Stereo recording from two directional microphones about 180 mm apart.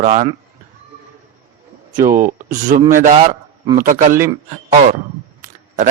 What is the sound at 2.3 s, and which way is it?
Speech, 45° right (ahead or behind).